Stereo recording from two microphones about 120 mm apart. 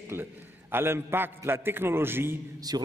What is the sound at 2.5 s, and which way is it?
Speech, 35° right (ahead or behind).